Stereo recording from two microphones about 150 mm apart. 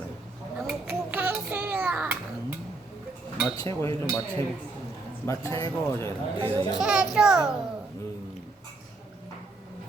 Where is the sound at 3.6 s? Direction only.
20° left (ahead or behind).